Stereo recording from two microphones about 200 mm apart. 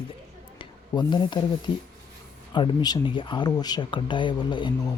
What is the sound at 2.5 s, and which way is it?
Speech, 20° left (ahead or behind).